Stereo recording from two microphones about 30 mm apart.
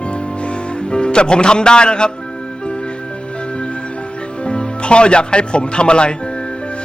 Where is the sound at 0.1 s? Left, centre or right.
Left.